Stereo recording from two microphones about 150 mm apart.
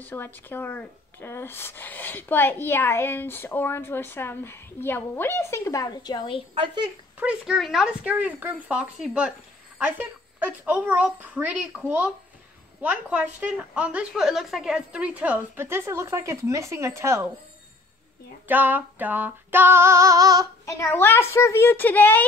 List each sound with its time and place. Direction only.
0.0 s speech: 15° left (ahead or behind); by 6.4 s 30° left (ahead or behind)
6.5 s speech: 35° right (ahead or behind)
7.2 s speech: 5° right (ahead or behind)
18.5 s speech: 10° right (ahead or behind)
20.6 s speech: 15° left (ahead or behind)